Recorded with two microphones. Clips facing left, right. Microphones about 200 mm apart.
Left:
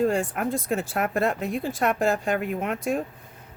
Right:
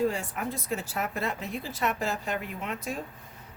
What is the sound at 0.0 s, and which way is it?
Speech, 50° left (ahead or behind).